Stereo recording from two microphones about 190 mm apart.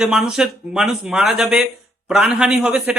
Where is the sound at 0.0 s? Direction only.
Centre (ahead or behind).